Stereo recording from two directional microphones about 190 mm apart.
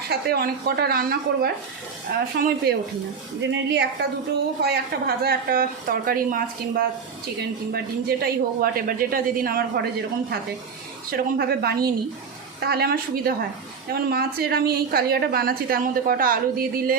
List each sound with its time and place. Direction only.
0.1 s a woman's voice: 55° right (ahead or behind)